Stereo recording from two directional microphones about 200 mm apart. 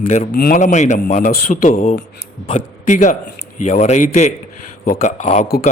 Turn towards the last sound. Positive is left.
turn(degrees=50)  # may be behind; listen again after turning